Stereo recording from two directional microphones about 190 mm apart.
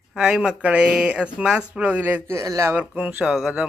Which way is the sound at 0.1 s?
5° right (ahead or behind).